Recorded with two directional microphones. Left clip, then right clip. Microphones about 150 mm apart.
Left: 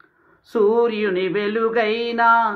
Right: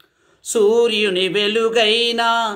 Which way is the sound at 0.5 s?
35° right (ahead or behind).